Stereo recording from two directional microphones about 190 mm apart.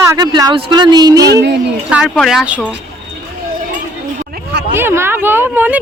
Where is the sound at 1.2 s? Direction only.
60° right (ahead or behind).